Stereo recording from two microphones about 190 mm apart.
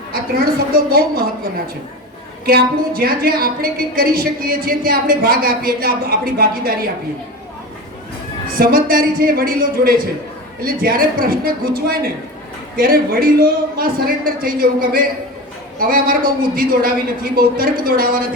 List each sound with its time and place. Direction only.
0.1 s a woman's voice: 50° right (ahead or behind)
2.5 s a woman's voice: 55° right (ahead or behind)
8.4 s a woman's voice: 50° right (ahead or behind)